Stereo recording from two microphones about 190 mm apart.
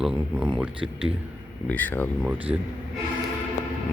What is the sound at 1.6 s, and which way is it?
Speech, 10° left (ahead or behind).